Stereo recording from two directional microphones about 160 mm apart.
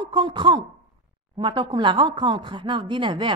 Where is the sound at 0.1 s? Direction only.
30° right (ahead or behind).